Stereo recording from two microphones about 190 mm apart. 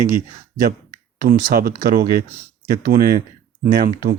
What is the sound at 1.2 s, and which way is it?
A man's voice, 45° right (ahead or behind).